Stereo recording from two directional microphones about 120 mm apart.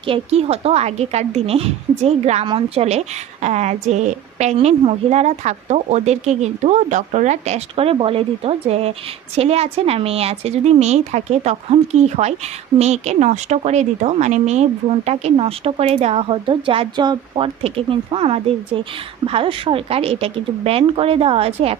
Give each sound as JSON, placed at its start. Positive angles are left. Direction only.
{"t": 0.0, "sound": "a woman's voice", "side_deg": -55}
{"t": 4.5, "sound": "speech", "side_deg": -55}